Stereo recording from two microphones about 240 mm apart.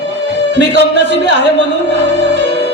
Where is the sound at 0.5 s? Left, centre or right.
Right.